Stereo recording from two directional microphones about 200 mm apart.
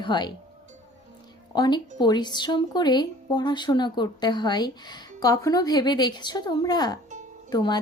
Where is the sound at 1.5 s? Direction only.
20° left (ahead or behind).